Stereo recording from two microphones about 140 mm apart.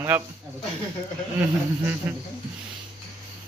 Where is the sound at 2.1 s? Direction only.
15° right (ahead or behind).